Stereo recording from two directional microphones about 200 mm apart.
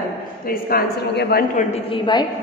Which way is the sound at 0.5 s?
50° left (ahead or behind).